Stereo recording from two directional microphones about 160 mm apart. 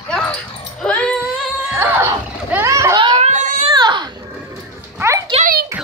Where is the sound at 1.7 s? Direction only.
15° right (ahead or behind).